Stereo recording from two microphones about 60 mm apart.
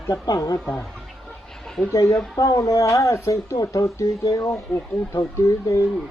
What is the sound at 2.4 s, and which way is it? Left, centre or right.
Speech, left.